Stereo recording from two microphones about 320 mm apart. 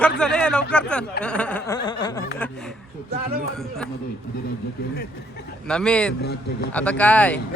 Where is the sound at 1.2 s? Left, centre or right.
Centre.